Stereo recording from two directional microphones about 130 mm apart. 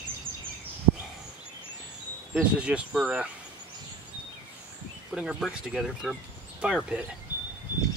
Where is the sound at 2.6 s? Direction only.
10° right (ahead or behind).